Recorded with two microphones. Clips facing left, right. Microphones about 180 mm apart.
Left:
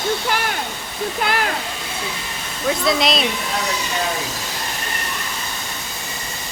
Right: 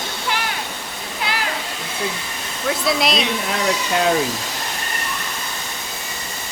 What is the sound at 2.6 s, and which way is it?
Speech, centre (ahead or behind).